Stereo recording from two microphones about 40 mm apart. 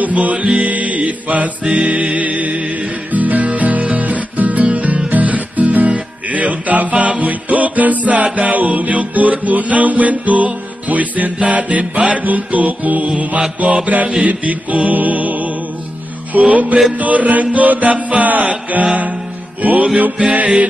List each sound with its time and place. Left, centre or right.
0.0 s music: right